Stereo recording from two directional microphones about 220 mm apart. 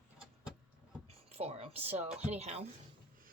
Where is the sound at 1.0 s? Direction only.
30° right (ahead or behind).